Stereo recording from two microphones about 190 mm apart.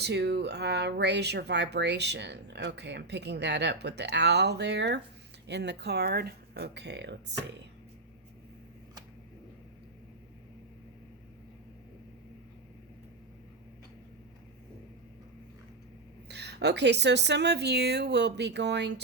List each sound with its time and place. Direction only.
0.0 s speech: 60° right (ahead or behind)
16.3 s speech: 60° right (ahead or behind)